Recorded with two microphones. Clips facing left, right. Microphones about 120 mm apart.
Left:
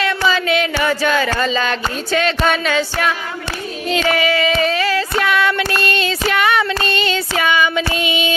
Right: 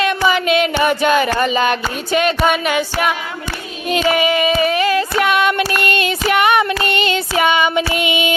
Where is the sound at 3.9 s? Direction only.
15° right (ahead or behind).